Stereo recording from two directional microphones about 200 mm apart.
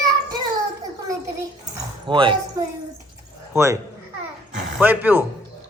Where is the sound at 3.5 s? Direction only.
15° right (ahead or behind).